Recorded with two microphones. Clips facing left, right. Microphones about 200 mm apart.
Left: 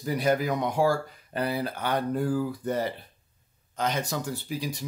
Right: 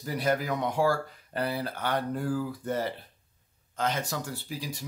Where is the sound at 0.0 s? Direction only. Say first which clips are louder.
Left 3 dB; 15° left (ahead or behind).